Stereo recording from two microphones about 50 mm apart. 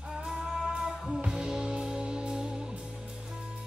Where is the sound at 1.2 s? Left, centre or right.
Centre.